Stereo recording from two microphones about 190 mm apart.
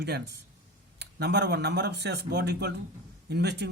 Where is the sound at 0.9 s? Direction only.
60° right (ahead or behind).